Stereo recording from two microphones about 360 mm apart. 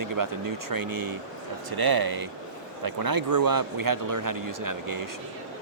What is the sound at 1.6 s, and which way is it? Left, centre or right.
Speech, right.